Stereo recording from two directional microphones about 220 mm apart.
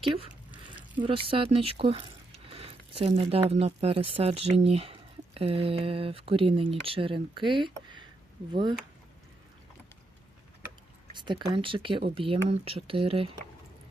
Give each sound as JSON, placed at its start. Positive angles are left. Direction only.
{"t": 0.0, "sound": "speech", "side_deg": -25}
{"t": 11.1, "sound": "speech", "side_deg": -20}